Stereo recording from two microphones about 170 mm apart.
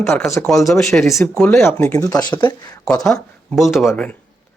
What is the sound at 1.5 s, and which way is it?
Speech, 15° left (ahead or behind).